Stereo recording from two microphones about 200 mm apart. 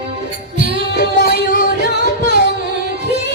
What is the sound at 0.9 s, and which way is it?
Music, 55° left (ahead or behind).